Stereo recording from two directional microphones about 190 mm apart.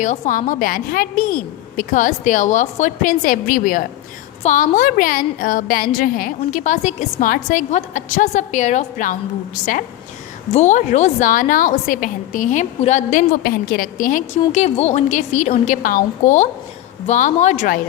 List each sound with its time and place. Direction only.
0.0 s a woman's voice: 40° left (ahead or behind)
10.5 s a woman's voice: 40° left (ahead or behind)